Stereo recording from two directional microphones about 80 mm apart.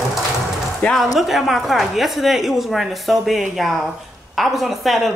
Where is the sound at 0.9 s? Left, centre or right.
Centre.